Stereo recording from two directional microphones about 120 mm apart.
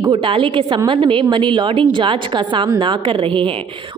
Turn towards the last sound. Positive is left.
turn(degrees=-45)  # may be behind; listen again after turning